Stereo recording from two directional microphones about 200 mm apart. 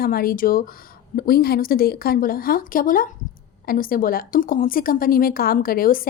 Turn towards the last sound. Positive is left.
turn(degrees=45)  # may be behind; listen again after turning